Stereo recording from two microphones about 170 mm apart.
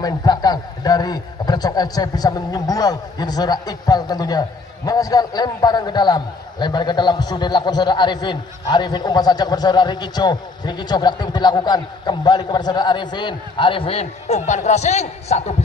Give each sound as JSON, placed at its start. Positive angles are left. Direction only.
{"t": 0.0, "sound": "a man's voice", "side_deg": 25}